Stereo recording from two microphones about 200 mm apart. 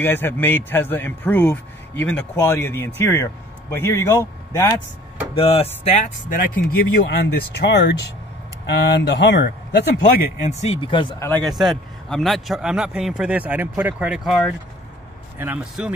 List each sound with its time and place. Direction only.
0.0 s a man's voice: 10° left (ahead or behind)
5.3 s speech: 30° left (ahead or behind)
7.1 s a man's voice: 55° left (ahead or behind)
10.4 s speech: 30° left (ahead or behind)
11.4 s a man's voice: centre (ahead or behind)